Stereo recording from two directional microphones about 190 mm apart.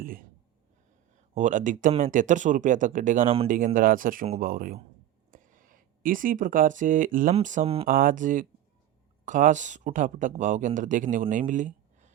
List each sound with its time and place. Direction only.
0.0 s a sound: 50° right (ahead or behind)
1.3 s speech: 40° right (ahead or behind)
7.9 s speech: 45° right (ahead or behind)